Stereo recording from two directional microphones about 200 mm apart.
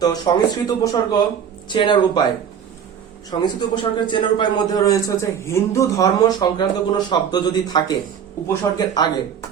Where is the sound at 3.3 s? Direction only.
20° left (ahead or behind).